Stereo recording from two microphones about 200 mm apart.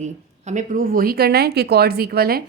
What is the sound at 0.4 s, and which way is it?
Speech, 40° right (ahead or behind).